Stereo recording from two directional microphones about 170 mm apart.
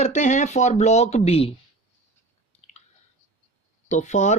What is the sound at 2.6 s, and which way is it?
Chewing, 40° left (ahead or behind).